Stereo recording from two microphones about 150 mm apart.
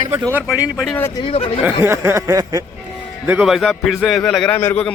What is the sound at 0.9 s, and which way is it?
Speech, 15° left (ahead or behind).